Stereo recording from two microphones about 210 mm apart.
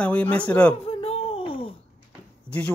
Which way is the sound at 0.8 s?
25° left (ahead or behind).